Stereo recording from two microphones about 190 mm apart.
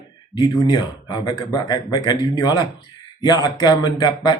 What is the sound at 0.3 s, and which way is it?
Speech, 20° left (ahead or behind).